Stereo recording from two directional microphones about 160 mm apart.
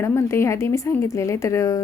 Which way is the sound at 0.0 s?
15° left (ahead or behind).